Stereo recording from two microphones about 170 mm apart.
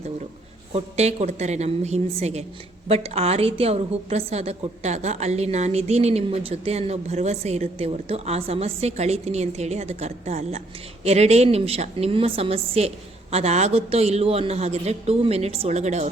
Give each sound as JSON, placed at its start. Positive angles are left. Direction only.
{"t": 0.7, "sound": "a woman's voice", "side_deg": -40}